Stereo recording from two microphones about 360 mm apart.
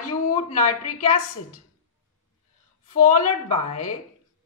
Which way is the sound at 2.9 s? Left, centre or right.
Left.